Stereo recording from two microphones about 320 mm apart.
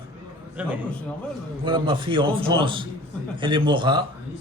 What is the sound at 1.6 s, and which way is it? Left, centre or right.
A man's voice, centre.